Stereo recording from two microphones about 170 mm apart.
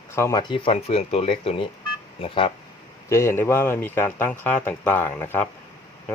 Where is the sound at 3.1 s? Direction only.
15° left (ahead or behind).